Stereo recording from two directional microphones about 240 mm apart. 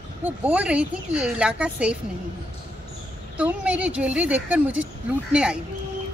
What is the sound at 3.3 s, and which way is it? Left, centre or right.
Speech, centre.